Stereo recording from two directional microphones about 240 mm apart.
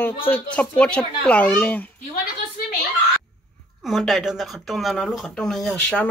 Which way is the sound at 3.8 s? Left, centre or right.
Centre.